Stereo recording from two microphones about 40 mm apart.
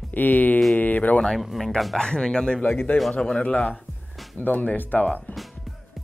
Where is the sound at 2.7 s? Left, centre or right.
Left.